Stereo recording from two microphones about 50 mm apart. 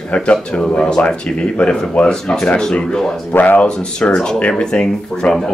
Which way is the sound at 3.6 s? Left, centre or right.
Centre.